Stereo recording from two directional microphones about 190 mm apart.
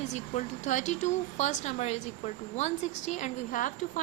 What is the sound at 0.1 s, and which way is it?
Speech, 40° left (ahead or behind).